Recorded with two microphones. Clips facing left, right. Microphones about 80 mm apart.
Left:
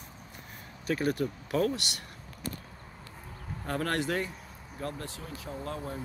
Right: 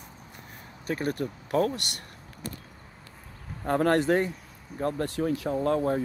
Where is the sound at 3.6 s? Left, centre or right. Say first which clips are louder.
Right 8 dB; right.